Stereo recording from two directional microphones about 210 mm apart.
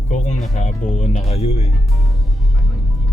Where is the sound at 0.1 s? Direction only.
35° left (ahead or behind).